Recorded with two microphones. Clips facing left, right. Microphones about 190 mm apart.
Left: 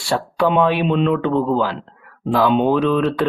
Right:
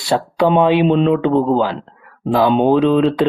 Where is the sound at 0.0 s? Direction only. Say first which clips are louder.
Right 3 dB; 20° right (ahead or behind).